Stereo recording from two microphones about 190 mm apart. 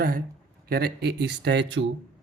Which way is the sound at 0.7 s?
55° right (ahead or behind).